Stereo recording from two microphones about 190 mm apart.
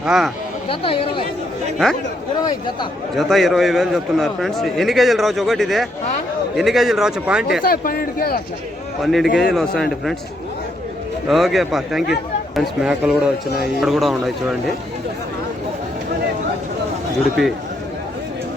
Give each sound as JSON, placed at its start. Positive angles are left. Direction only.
{"t": 0.0, "sound": "a man's voice", "side_deg": -5}
{"t": 0.7, "sound": "speech", "side_deg": 30}
{"t": 1.8, "sound": "a man's voice", "side_deg": 5}
{"t": 2.4, "sound": "speech", "side_deg": 20}
{"t": 3.2, "sound": "a man's voice", "side_deg": 0}
{"t": 7.6, "sound": "speech", "side_deg": 50}
{"t": 9.0, "sound": "a man's voice", "side_deg": 0}
{"t": 11.3, "sound": "a man's voice", "side_deg": 0}
{"t": 17.4, "sound": "a man's voice", "side_deg": 0}